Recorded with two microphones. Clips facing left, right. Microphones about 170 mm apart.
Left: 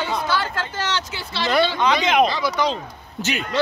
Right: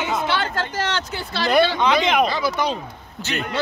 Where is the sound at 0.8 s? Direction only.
50° right (ahead or behind).